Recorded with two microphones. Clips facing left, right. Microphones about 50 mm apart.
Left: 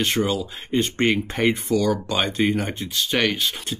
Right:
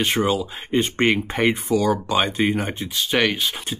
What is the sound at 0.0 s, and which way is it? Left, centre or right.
Speech, centre.